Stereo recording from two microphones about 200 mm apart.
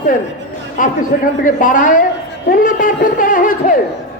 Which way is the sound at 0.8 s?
40° left (ahead or behind).